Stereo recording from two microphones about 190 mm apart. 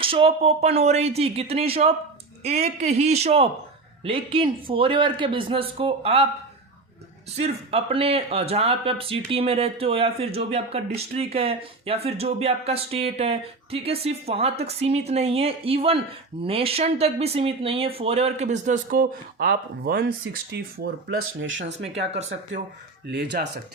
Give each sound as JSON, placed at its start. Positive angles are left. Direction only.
{"t": 0.0, "sound": "a man's voice", "side_deg": -30}
{"t": 7.3, "sound": "speech", "side_deg": -35}
{"t": 21.2, "sound": "speech", "side_deg": -90}
{"t": 22.1, "sound": "speech", "side_deg": -35}
{"t": 23.0, "sound": "speech", "side_deg": -60}